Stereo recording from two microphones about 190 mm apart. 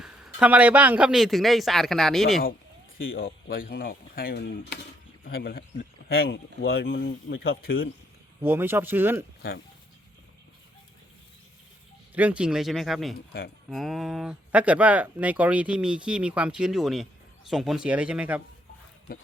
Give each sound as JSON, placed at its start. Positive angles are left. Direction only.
{"t": 0.0, "sound": "speech", "side_deg": -5}
{"t": 3.2, "sound": "speech", "side_deg": 50}
{"t": 4.4, "sound": "speech", "side_deg": 60}
{"t": 6.3, "sound": "speech", "side_deg": 65}
{"t": 8.4, "sound": "speech", "side_deg": -10}
{"t": 12.1, "sound": "speech", "side_deg": -5}
{"t": 13.1, "sound": "speech", "side_deg": 55}
{"t": 13.7, "sound": "speech", "side_deg": 0}